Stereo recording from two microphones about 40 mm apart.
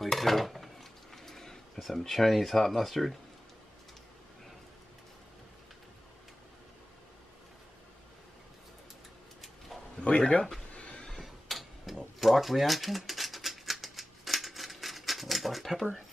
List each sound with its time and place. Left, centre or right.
0.0 s chopping: centre
1.9 s speech: centre
9.9 s speech: left
10.7 s neigh: left
11.2 s tick-tock: centre
12.2 s a sound: centre